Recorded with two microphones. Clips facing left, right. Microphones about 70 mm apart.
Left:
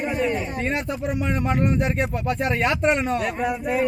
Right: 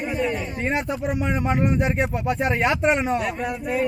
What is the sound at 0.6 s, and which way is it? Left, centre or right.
Speech, centre.